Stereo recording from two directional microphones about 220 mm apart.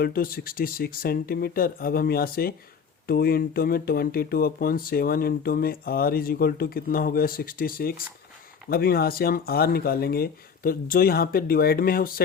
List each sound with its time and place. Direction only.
0.0 s speech: 40° left (ahead or behind)